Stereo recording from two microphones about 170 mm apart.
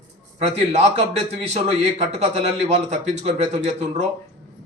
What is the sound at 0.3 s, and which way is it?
A man's voice, 40° right (ahead or behind).